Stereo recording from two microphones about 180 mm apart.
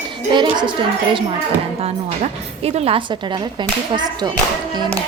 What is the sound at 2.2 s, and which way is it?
Speech, 35° right (ahead or behind).